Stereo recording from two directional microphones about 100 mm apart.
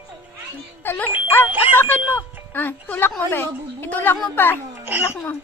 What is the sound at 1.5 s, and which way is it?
Speech, 20° right (ahead or behind).